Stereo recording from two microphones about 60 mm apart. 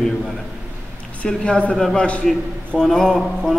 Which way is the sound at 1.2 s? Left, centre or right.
Centre.